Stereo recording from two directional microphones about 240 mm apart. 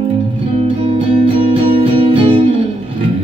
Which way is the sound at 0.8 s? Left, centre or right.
Right.